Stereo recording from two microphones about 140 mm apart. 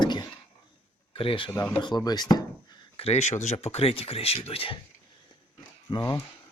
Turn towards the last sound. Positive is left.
turn(degrees=30)  # may be behind; listen again after turning